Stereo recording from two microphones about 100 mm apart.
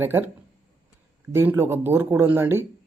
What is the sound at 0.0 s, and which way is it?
Speech, 20° right (ahead or behind).